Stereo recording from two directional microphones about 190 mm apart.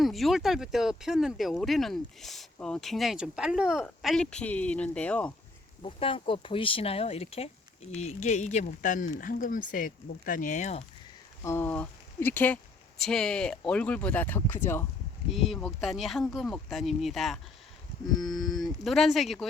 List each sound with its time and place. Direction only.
0.0 s speech: centre (ahead or behind)
5.8 s speech: 30° left (ahead or behind)
11.4 s speech: 10° left (ahead or behind)
15.4 s speech: centre (ahead or behind)
18.4 s speech: centre (ahead or behind)